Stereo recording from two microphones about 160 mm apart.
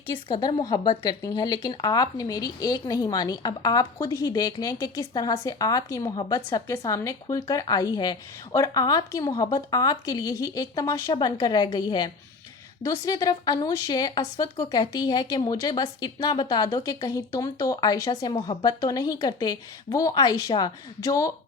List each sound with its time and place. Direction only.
0.3 s speech: 30° left (ahead or behind)